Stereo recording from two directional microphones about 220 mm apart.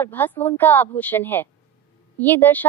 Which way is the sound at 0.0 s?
10° left (ahead or behind).